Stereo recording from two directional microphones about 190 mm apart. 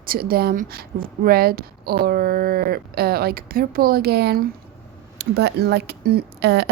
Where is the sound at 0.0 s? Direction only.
50° right (ahead or behind).